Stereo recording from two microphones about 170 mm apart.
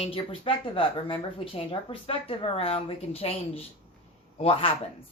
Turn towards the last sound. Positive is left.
turn(degrees=30)  # may be behind; listen again after turning